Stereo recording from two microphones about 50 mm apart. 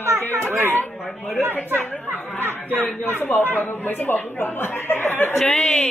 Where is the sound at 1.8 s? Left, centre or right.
Left.